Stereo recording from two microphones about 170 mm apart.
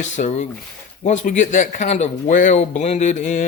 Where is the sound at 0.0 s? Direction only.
45° left (ahead or behind).